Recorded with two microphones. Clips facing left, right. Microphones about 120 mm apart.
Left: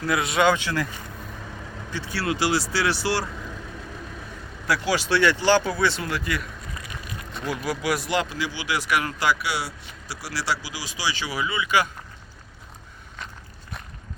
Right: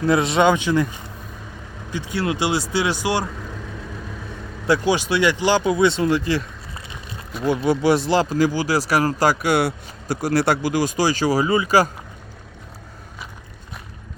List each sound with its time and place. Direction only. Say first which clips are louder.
0.0 s speech: right 5 dB; 25° right (ahead or behind)
1.9 s speech: right 4 dB; 15° right (ahead or behind)
4.6 s speech: right 6 dB; 25° right (ahead or behind)